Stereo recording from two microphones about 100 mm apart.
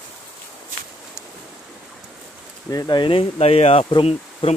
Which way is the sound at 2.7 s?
50° left (ahead or behind).